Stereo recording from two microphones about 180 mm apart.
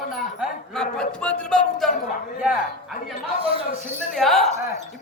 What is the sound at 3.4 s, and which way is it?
Speech, 30° right (ahead or behind).